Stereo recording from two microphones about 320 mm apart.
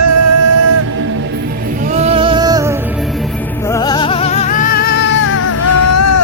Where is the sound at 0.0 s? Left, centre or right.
Right.